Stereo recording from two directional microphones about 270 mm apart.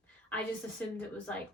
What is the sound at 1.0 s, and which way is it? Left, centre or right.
Speech, centre.